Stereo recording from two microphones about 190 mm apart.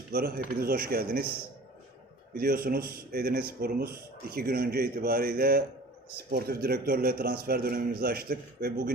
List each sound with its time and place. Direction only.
0.1 s speech: 50° right (ahead or behind)
2.3 s speech: 50° right (ahead or behind)